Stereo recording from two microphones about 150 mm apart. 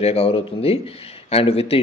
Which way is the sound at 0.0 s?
40° left (ahead or behind).